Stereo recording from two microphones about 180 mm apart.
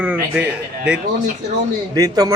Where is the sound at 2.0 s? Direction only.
20° right (ahead or behind).